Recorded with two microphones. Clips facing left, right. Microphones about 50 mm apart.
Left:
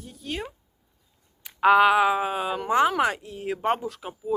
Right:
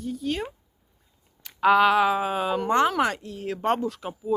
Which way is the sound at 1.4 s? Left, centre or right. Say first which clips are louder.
Left 1 dB; centre.